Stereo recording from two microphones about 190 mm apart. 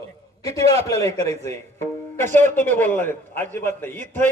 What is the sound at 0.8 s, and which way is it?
Speech, 15° left (ahead or behind).